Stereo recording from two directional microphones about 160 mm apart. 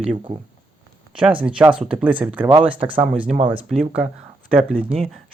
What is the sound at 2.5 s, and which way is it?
Speech, 30° right (ahead or behind).